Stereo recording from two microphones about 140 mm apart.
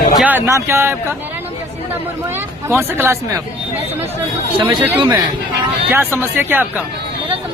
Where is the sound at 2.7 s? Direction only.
15° right (ahead or behind).